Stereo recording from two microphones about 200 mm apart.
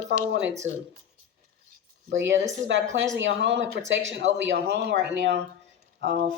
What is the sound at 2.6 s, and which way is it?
A woman's voice, 65° right (ahead or behind).